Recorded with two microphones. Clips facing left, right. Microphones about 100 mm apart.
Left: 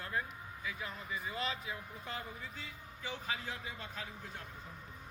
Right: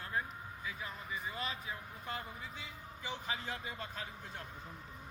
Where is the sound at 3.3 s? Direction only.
30° right (ahead or behind).